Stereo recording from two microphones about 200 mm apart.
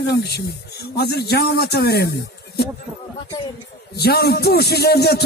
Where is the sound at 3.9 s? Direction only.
55° left (ahead or behind).